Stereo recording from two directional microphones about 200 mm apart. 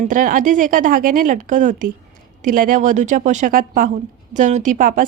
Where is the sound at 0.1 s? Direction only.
40° right (ahead or behind).